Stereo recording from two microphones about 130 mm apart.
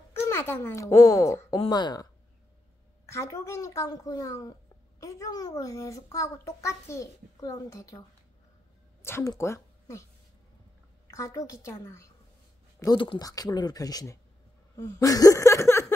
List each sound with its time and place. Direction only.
0.1 s a child's voice: 20° left (ahead or behind)
3.1 s a child's voice: 20° left (ahead or behind)
9.0 s speech: 20° left (ahead or behind)
11.1 s a child's voice: 25° left (ahead or behind)
12.8 s speech: 40° left (ahead or behind)
13.2 s a child's voice: 25° left (ahead or behind)